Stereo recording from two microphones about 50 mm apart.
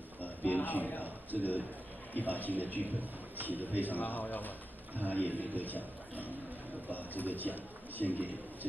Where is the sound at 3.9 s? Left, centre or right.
Left.